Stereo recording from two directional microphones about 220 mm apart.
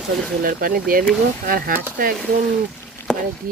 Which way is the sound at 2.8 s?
10° left (ahead or behind).